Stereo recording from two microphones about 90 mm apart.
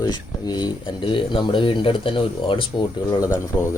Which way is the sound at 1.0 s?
65° left (ahead or behind).